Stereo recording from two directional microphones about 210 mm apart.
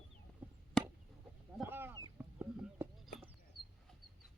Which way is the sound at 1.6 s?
10° right (ahead or behind).